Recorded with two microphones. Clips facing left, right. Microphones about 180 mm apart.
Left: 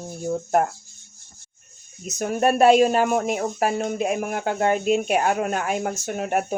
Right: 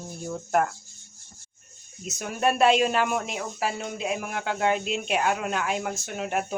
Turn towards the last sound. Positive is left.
turn(degrees=50)  # may be behind; listen again after turning